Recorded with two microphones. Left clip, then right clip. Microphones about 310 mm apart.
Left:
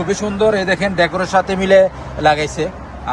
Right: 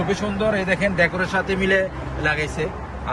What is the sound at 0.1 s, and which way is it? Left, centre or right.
A man's voice, centre.